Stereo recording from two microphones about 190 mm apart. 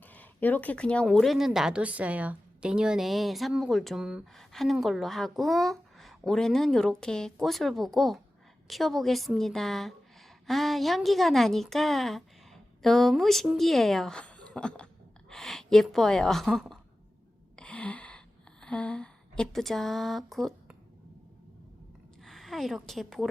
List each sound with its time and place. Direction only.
0.0 s a woman's voice: 10° left (ahead or behind)
17.6 s gasp: 5° left (ahead or behind)
18.6 s speech: 5° left (ahead or behind)
22.2 s a woman's voice: centre (ahead or behind)